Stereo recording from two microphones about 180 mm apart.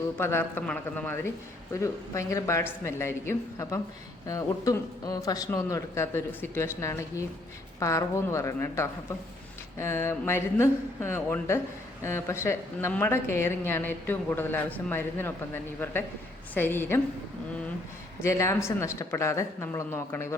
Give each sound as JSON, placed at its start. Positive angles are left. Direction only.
{"t": 0.2, "sound": "speech", "side_deg": 10}
{"t": 18.2, "sound": "speech", "side_deg": 15}